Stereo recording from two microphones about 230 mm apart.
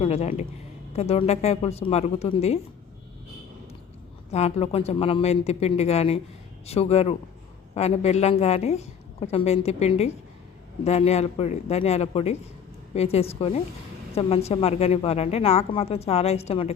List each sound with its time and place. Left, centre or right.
0.0 s a woman's voice: left
4.3 s a woman's voice: left